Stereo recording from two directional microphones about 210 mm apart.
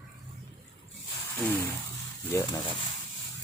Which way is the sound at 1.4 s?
10° left (ahead or behind).